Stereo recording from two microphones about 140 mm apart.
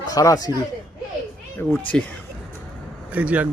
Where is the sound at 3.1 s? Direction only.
10° right (ahead or behind).